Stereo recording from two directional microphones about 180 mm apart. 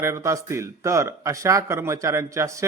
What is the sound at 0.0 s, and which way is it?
A man's voice, 15° right (ahead or behind).